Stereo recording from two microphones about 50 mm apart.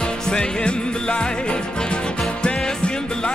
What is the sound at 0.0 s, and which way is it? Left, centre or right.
Music, centre.